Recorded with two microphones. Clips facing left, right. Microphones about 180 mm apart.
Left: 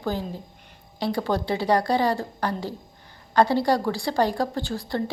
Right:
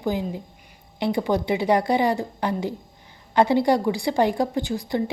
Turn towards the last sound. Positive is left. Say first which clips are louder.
# right 3 dB
turn(degrees=-20)  # may be behind; listen again after turning